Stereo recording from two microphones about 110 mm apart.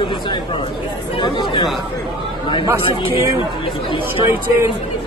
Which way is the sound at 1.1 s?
50° left (ahead or behind).